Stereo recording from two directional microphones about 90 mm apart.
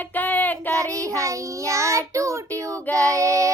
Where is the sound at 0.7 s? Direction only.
35° right (ahead or behind).